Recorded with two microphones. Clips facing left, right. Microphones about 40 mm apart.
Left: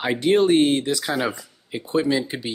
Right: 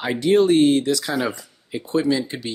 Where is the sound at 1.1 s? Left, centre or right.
Centre.